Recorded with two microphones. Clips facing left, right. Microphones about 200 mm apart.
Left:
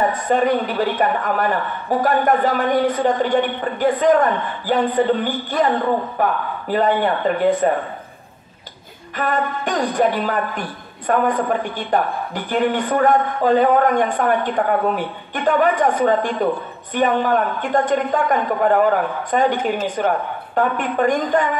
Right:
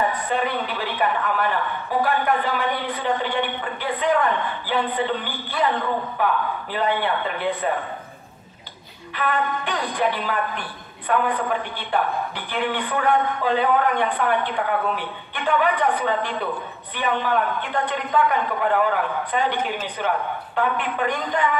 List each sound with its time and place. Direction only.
0.0 s a woman's voice: 45° left (ahead or behind)
9.1 s a woman's voice: 45° left (ahead or behind)